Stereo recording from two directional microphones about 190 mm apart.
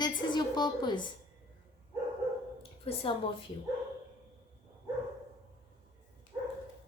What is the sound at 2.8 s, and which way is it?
Speech, 30° left (ahead or behind).